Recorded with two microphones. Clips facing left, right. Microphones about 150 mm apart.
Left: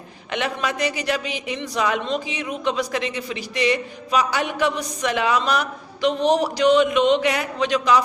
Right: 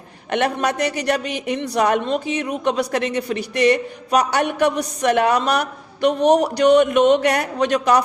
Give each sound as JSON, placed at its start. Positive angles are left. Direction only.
{"t": 0.3, "sound": "a man's voice", "side_deg": -60}